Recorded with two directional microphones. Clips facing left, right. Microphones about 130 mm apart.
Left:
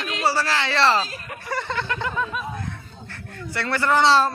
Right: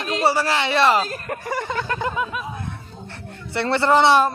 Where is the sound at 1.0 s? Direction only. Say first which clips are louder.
Right 7 dB; 50° right (ahead or behind).